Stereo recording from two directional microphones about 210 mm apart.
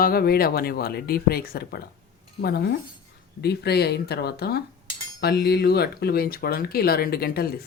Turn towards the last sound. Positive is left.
turn(degrees=45)  # may be behind; listen again after turning